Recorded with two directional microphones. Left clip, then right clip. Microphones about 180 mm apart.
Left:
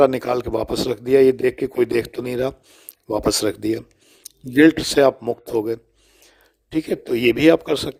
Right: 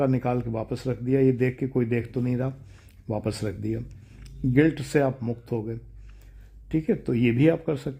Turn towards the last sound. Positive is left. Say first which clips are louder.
# left 8 dB
turn(degrees=40)  # may be behind; listen again after turning